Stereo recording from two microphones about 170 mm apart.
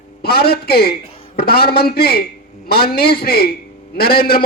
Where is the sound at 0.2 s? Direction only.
65° left (ahead or behind).